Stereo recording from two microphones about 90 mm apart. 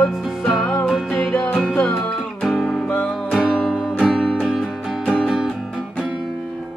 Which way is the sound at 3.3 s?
Centre (ahead or behind).